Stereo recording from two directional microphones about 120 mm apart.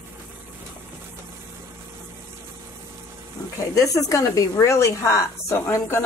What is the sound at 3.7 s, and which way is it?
Speech, 30° left (ahead or behind).